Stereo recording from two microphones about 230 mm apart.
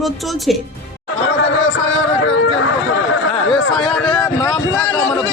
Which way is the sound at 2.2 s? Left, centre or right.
Left.